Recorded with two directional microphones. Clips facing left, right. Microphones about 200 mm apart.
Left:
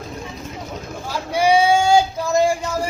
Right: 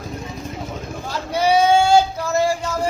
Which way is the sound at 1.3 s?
10° left (ahead or behind).